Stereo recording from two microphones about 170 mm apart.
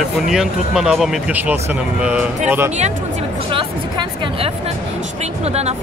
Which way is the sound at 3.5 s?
30° right (ahead or behind).